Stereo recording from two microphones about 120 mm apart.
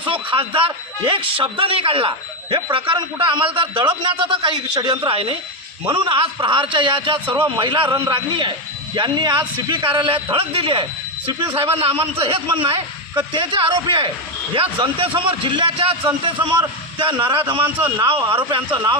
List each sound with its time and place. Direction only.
0.0 s a man's voice: 45° right (ahead or behind)